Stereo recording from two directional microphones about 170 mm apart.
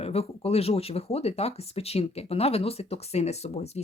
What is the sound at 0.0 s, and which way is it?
Speech, 35° left (ahead or behind).